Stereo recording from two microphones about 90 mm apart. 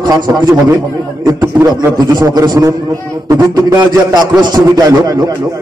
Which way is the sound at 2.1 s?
45° right (ahead or behind).